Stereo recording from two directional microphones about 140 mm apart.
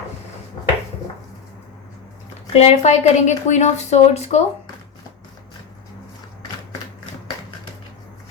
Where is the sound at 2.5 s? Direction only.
45° left (ahead or behind).